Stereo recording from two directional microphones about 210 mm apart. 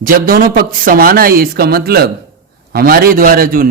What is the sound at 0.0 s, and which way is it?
A man's voice, 40° right (ahead or behind).